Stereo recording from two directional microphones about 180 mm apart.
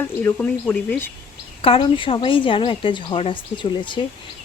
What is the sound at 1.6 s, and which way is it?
Speech, 30° left (ahead or behind).